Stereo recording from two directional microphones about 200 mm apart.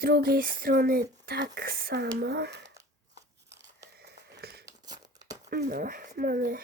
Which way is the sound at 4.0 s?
55° right (ahead or behind).